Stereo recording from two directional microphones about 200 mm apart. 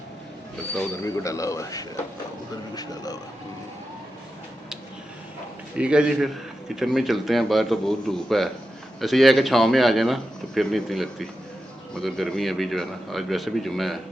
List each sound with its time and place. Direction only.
1.0 s a man's voice: 15° left (ahead or behind)
5.7 s a man's voice: 5° right (ahead or behind)